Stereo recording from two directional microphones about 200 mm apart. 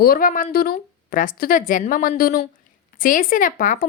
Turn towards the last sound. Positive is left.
turn(degrees=40)  # may be behind; listen again after turning